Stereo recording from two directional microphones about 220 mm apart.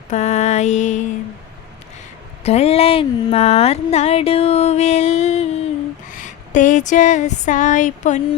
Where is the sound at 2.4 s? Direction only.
30° left (ahead or behind).